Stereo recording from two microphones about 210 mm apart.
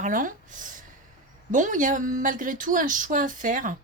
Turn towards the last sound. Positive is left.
turn(degrees=-40)  # may be behind; listen again after turning